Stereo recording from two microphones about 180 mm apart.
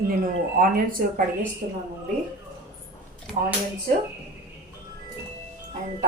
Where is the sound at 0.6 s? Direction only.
50° right (ahead or behind).